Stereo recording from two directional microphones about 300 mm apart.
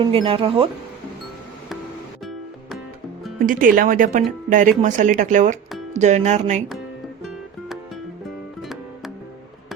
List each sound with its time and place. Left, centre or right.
0.0 s speech: centre
3.3 s speech: right
8.6 s music: centre